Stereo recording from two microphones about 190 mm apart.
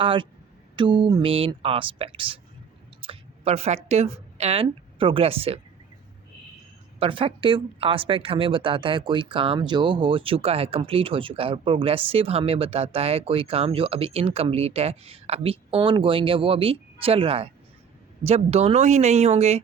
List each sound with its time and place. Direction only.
0.0 s speech: 25° right (ahead or behind)
3.0 s a sound: 30° right (ahead or behind)
3.8 s a woman's voice: 35° right (ahead or behind)
7.0 s speech: 30° right (ahead or behind)